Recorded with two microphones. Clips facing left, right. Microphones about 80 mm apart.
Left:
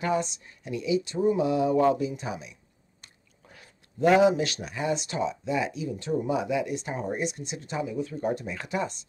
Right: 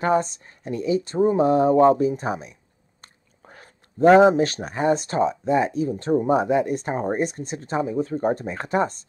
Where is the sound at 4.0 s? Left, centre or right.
Right.